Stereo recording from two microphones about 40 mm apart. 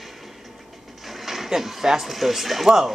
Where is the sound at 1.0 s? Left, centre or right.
Centre.